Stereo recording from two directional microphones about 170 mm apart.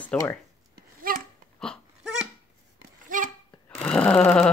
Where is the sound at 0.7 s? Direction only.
60° right (ahead or behind).